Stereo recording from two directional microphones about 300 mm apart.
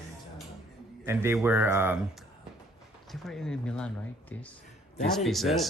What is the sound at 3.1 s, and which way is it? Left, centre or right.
Speech, centre.